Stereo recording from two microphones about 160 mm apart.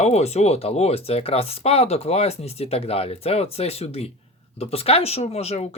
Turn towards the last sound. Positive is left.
turn(degrees=40)  # may be behind; listen again after turning